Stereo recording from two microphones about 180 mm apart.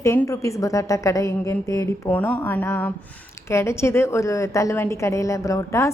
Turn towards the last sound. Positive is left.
turn(degrees=15)  # may be behind; listen again after turning